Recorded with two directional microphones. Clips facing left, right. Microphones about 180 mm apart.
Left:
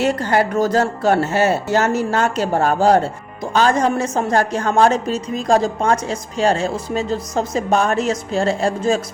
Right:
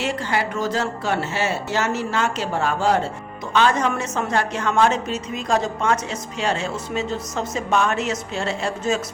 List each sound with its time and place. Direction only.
0.0 s a woman's voice: 45° left (ahead or behind)